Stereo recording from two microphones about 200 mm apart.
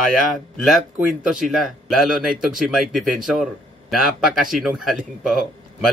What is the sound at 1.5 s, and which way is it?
Speech, centre (ahead or behind).